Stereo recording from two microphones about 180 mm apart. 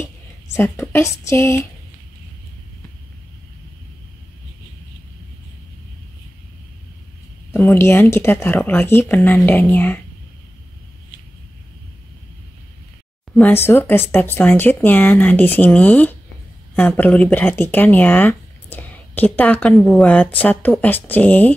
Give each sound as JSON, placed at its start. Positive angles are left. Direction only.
{"t": 0.6, "sound": "speech", "side_deg": 15}
{"t": 7.5, "sound": "speech", "side_deg": 10}
{"t": 13.3, "sound": "speech", "side_deg": 10}